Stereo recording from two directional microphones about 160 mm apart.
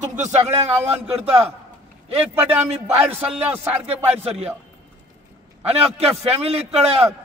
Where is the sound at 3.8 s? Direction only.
40° right (ahead or behind).